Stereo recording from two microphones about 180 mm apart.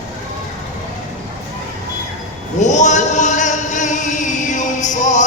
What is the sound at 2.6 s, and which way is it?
Chant, 40° left (ahead or behind).